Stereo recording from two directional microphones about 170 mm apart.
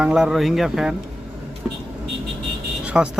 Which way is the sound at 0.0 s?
5° right (ahead or behind).